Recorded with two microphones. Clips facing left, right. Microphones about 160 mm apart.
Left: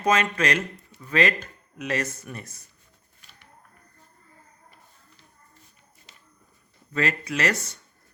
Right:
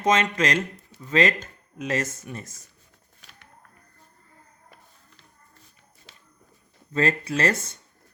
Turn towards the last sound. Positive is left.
turn(degrees=-25)  # may be behind; listen again after turning